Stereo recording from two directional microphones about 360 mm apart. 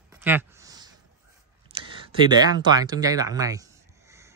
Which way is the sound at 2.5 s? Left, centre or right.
Centre.